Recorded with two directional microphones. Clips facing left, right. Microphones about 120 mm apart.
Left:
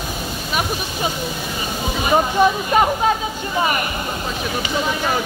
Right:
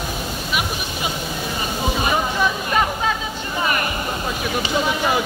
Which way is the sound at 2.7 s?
35° left (ahead or behind).